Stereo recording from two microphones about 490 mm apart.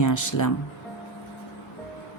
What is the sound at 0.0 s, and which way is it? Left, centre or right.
Speech, left.